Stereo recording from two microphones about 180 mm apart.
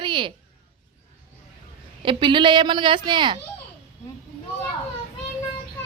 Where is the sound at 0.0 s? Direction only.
25° right (ahead or behind).